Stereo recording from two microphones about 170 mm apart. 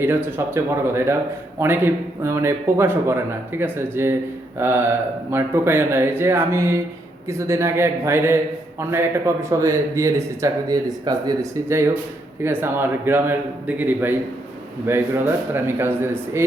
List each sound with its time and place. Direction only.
0.0 s a man's voice: 10° right (ahead or behind)